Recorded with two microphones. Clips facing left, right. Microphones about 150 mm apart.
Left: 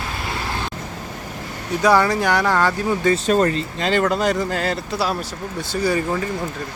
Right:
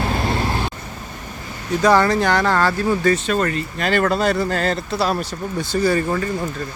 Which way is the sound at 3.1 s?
35° left (ahead or behind).